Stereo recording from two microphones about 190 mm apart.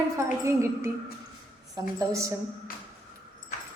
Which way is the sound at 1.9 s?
15° right (ahead or behind).